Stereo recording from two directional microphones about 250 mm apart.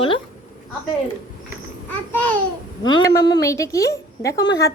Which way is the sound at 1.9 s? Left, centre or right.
Centre.